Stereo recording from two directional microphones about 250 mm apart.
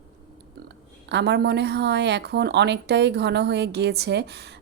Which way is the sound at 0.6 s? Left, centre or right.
Right.